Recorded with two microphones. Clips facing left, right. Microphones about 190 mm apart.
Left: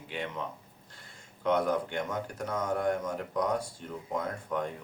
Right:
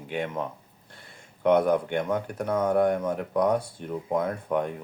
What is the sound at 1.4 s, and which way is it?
Speech, 60° right (ahead or behind).